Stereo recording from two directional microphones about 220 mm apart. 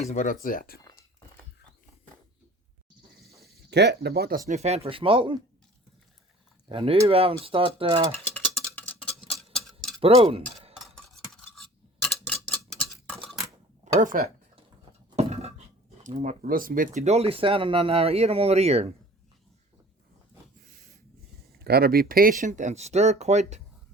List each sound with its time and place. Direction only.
0.0 s speech: 35° left (ahead or behind)
3.2 s a sound: centre (ahead or behind)
3.7 s speech: 50° right (ahead or behind); by 5.4 s 25° right (ahead or behind)
6.7 s speech: 25° right (ahead or behind)
8.1 s a sound: 5° left (ahead or behind)
10.3 s cutlery: 25° right (ahead or behind)
10.9 s stir: centre (ahead or behind)
12.0 s clock: 5° left (ahead or behind)
14.0 s speech: 40° right (ahead or behind)
15.1 s a sound: 30° right (ahead or behind)
16.0 s speech: 35° right (ahead or behind)
21.6 s speech: 45° right (ahead or behind); by 23.6 s 30° right (ahead or behind)